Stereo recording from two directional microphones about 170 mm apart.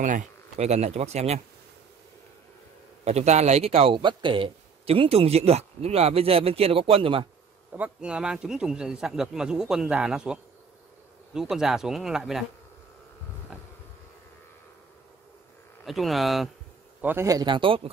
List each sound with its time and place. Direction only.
0.0 s speech: 45° right (ahead or behind)
3.1 s speech: 40° right (ahead or behind)
7.7 s a man's voice: 5° right (ahead or behind)
13.5 s insect: 5° right (ahead or behind)
15.8 s a man's voice: centre (ahead or behind)
17.0 s speech: 15° right (ahead or behind); by 17.8 s 30° right (ahead or behind)